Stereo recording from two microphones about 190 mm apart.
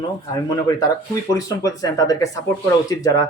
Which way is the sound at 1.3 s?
20° left (ahead or behind).